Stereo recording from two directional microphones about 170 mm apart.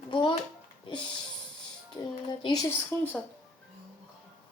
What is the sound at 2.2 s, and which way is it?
Speech, 25° left (ahead or behind).